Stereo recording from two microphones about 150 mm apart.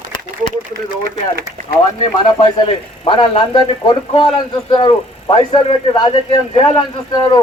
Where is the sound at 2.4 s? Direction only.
35° left (ahead or behind).